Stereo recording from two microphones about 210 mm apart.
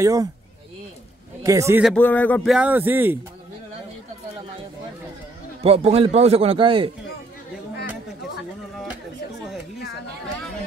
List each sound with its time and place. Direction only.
0.0 s a man's voice: 15° right (ahead or behind)
1.4 s a man's voice: 15° right (ahead or behind)
1.8 s a man's voice: 5° left (ahead or behind)
5.6 s a man's voice: 30° right (ahead or behind)